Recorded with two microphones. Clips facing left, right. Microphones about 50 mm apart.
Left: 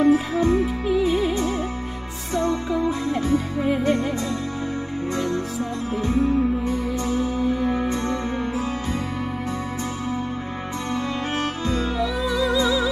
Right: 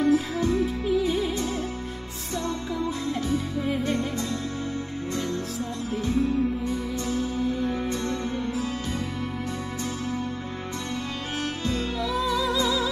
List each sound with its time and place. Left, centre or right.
0.0 s music: left
6.0 s music: left
12.0 s music: centre